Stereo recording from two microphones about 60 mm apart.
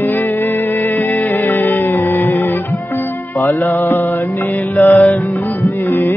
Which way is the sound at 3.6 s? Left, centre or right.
Left.